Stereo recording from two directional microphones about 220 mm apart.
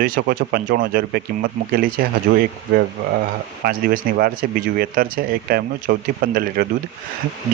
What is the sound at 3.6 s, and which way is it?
Speech, 40° right (ahead or behind).